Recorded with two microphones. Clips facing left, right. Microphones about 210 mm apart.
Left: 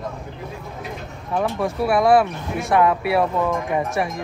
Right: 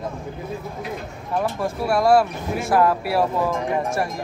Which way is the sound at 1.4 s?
Centre (ahead or behind).